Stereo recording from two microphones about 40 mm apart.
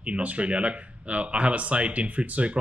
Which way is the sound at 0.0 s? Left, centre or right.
Right.